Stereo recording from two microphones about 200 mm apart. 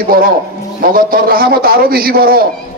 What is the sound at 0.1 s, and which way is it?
A man's voice, 45° right (ahead or behind).